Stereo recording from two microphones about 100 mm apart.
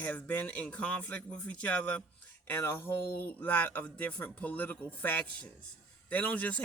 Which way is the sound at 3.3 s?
15° left (ahead or behind).